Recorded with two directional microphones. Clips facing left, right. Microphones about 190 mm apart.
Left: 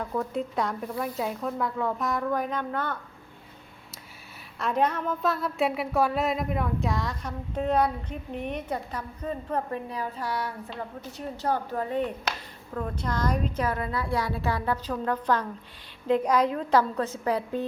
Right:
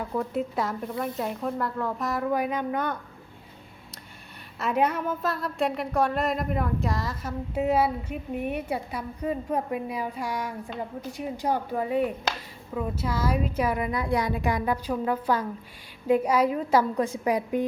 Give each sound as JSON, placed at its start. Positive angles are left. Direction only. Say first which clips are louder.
{"t": 0.0, "sound": "speech", "louder": "right 1 dB", "side_deg": -10}
{"t": 4.5, "sound": "a woman's voice", "louder": "right 1 dB", "side_deg": -5}